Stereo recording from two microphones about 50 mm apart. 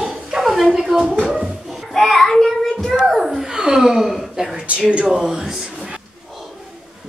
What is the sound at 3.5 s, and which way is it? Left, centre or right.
Speech, centre.